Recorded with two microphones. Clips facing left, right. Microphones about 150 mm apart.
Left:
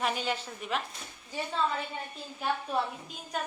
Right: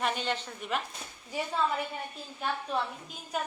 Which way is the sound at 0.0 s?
5° left (ahead or behind).